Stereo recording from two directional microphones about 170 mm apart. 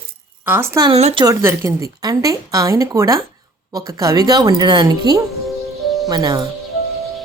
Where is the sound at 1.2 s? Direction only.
15° right (ahead or behind).